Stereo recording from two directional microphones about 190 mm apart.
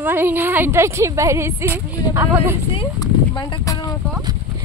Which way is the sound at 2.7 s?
20° left (ahead or behind).